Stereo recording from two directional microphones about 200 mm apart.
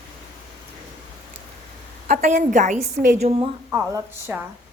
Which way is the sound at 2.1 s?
45° right (ahead or behind).